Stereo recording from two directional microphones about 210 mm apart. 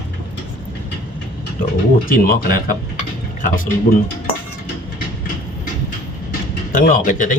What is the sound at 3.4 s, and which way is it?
Speech, 40° left (ahead or behind).